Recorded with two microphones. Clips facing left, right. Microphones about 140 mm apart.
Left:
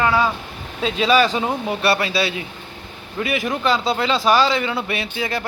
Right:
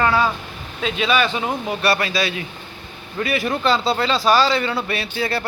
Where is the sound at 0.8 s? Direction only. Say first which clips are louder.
Left 3 dB; 35° left (ahead or behind).